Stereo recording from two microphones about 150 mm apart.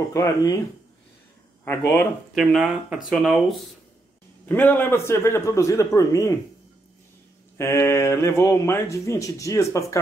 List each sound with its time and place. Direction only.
0.1 s speech: 20° left (ahead or behind)
1.6 s speech: 15° left (ahead or behind)
2.3 s speech: 5° right (ahead or behind)
4.5 s a man's voice: 15° left (ahead or behind)
7.5 s speech: 20° left (ahead or behind)